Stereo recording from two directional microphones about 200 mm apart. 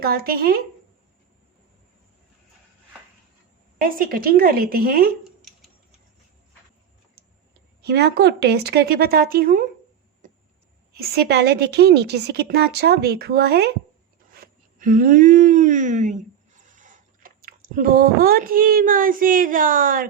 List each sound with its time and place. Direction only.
0.0 s a woman's voice: 50° right (ahead or behind)
3.8 s a woman's voice: 45° right (ahead or behind)
7.8 s a woman's voice: 55° right (ahead or behind)
10.9 s a woman's voice: 50° right (ahead or behind)